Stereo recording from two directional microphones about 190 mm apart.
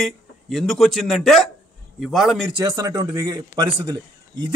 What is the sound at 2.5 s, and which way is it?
A man's voice, 20° right (ahead or behind).